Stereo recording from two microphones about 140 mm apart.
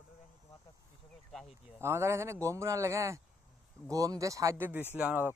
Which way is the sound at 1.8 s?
20° right (ahead or behind).